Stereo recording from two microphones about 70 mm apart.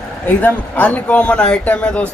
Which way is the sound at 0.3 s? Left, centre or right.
Left.